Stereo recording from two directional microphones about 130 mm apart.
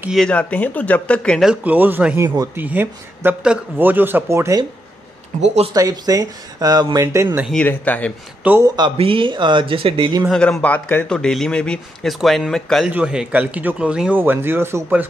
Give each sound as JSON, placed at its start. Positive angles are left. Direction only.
{"t": 0.1, "sound": "speech", "side_deg": 5}
{"t": 1.4, "sound": "speech", "side_deg": -10}
{"t": 2.2, "sound": "speech", "side_deg": -25}
{"t": 2.6, "sound": "speech", "side_deg": -15}
{"t": 5.7, "sound": "speech", "side_deg": -30}
{"t": 7.6, "sound": "speech", "side_deg": 15}
{"t": 8.4, "sound": "speech", "side_deg": -10}
{"t": 8.9, "sound": "speech", "side_deg": -45}
{"t": 10.3, "sound": "a man's voice", "side_deg": 5}